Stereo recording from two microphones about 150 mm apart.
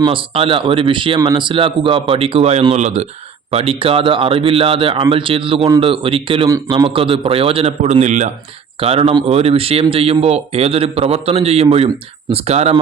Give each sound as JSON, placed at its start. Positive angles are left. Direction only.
{"t": 0.1, "sound": "speech", "side_deg": -35}
{"t": 8.8, "sound": "a man's voice", "side_deg": -40}